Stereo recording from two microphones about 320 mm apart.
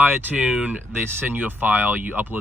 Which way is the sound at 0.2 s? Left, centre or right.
Centre.